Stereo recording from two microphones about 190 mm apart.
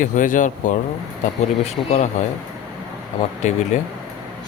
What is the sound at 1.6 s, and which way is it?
Speech, 35° left (ahead or behind).